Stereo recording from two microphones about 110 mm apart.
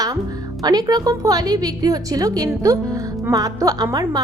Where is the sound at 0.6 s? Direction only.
35° right (ahead or behind).